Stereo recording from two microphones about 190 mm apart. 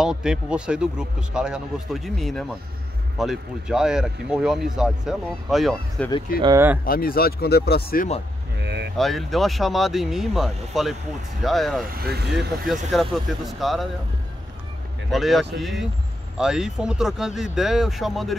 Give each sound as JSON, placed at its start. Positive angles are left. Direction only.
{"t": 0.0, "sound": "speech", "side_deg": -5}
{"t": 6.4, "sound": "speech", "side_deg": -15}
{"t": 6.8, "sound": "speech", "side_deg": 50}
{"t": 8.5, "sound": "a sound", "side_deg": -65}
{"t": 8.9, "sound": "speech", "side_deg": 0}
{"t": 11.8, "sound": "speech", "side_deg": -50}
{"t": 12.9, "sound": "speech", "side_deg": 0}
{"t": 15.0, "sound": "speech", "side_deg": 0}